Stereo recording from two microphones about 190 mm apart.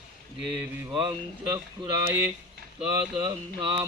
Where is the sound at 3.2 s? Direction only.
20° right (ahead or behind).